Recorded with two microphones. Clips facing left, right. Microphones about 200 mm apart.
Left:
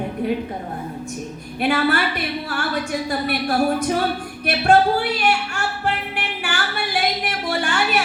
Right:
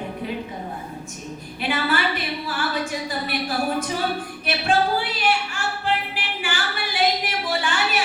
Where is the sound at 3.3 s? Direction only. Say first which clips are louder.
Left 5 dB; 50° left (ahead or behind).